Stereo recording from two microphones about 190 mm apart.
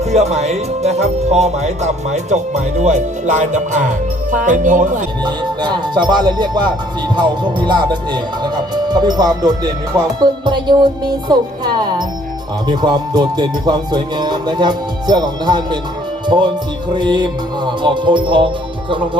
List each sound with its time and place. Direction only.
0.0 s music: 35° right (ahead or behind)
5.2 s music: 25° right (ahead or behind)
16.2 s speech: 25° right (ahead or behind)
16.9 s music: 25° right (ahead or behind)